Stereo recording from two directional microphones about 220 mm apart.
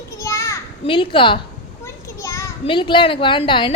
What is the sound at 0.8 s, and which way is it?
A woman's voice, 25° left (ahead or behind).